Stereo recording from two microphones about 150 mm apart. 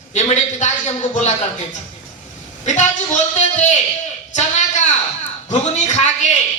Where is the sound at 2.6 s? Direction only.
50° left (ahead or behind).